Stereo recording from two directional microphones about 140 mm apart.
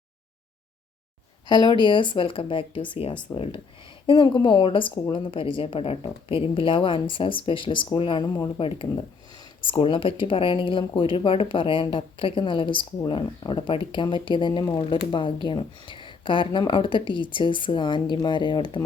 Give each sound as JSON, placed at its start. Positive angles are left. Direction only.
{"t": 1.5, "sound": "speech", "side_deg": 35}